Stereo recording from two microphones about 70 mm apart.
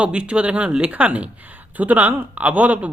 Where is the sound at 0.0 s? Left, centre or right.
Centre.